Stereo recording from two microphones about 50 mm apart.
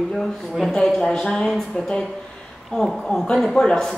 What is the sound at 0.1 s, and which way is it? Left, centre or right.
A woman's voice, centre.